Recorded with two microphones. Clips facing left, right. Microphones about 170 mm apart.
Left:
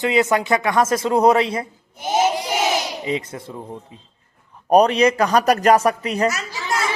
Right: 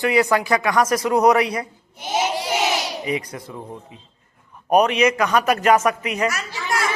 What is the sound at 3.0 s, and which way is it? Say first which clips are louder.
A man's voice: left 1 dB; 25° left (ahead or behind).